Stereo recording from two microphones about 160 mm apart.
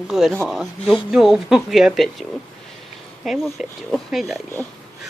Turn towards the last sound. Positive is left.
turn(degrees=0)  # may be behind; listen again after turning